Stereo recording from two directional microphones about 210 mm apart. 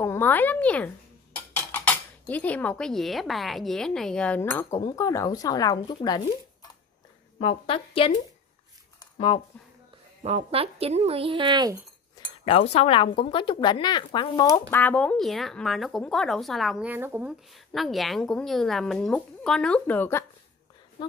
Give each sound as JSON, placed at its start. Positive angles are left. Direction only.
{"t": 0.0, "sound": "speech", "side_deg": 10}
{"t": 7.3, "sound": "a woman's voice", "side_deg": 25}
{"t": 10.2, "sound": "speech", "side_deg": -30}
{"t": 12.4, "sound": "a woman's voice", "side_deg": 30}